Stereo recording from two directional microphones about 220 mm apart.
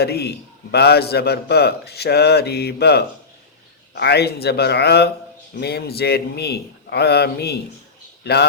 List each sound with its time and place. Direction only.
0.0 s a man's voice: 45° left (ahead or behind)